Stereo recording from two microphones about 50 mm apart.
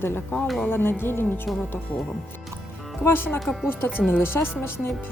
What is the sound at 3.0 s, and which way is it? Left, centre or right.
Speech, left.